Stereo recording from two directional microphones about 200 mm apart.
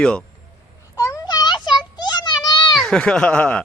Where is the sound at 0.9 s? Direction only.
15° left (ahead or behind).